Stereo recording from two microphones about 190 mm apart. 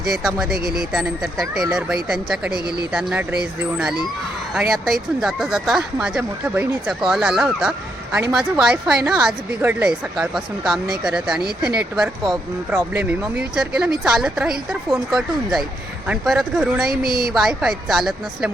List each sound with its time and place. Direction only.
0.1 s a woman's voice: centre (ahead or behind)
0.6 s a woman's voice: 55° right (ahead or behind)
0.9 s a woman's voice: centre (ahead or behind)
2.5 s speech: 55° right (ahead or behind)
2.9 s a woman's voice: 5° right (ahead or behind)
16.9 s a woman's voice: 50° right (ahead or behind)
17.3 s a woman's voice: centre (ahead or behind)